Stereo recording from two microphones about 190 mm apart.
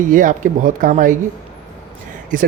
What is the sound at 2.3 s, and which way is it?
Speech, 45° right (ahead or behind).